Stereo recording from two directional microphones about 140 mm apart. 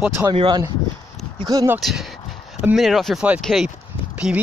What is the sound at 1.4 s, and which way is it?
Speech, 25° right (ahead or behind).